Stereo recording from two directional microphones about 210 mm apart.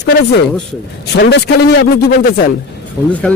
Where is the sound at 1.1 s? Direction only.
55° left (ahead or behind).